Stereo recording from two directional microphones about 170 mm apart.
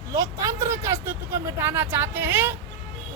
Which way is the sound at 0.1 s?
20° right (ahead or behind).